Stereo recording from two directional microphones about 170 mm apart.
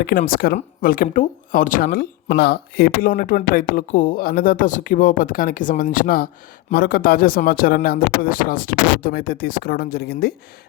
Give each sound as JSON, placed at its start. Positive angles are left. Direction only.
{"t": 0.0, "sound": "speech", "side_deg": 55}